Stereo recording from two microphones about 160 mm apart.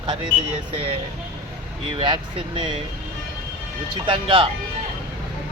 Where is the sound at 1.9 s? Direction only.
30° right (ahead or behind).